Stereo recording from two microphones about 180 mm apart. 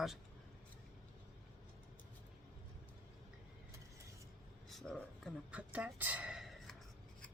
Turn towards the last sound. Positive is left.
turn(degrees=0)  # may be behind; listen again after turning